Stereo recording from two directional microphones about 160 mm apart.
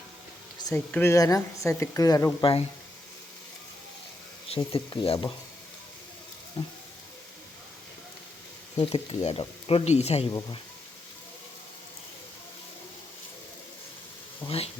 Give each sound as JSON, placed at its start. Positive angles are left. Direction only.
{"t": 0.6, "sound": "a woman's voice", "side_deg": 15}
{"t": 2.4, "sound": "speech", "side_deg": 35}
{"t": 4.4, "sound": "speech", "side_deg": 35}
{"t": 8.7, "sound": "speech", "side_deg": 35}
{"t": 14.4, "sound": "speech", "side_deg": 35}